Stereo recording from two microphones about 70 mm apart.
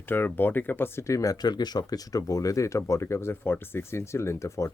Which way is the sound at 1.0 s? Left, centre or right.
Left.